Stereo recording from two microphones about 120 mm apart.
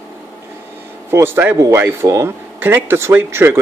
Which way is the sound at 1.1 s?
20° right (ahead or behind).